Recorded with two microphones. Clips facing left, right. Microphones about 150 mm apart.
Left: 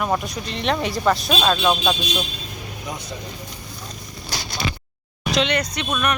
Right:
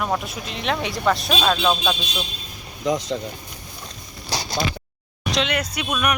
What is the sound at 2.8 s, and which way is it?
Speech, 90° right.